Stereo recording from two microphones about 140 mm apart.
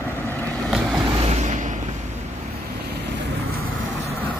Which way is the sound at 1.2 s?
55° right (ahead or behind).